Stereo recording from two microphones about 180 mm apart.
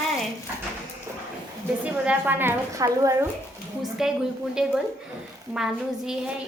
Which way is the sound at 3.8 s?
Centre (ahead or behind).